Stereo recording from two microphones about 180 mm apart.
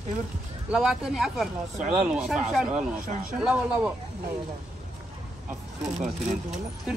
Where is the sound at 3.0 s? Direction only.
50° right (ahead or behind).